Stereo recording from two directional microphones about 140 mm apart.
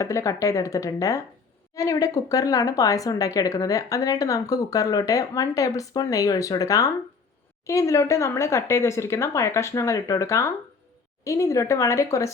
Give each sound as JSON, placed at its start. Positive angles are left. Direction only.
{"t": 0.0, "sound": "a woman's voice", "side_deg": 20}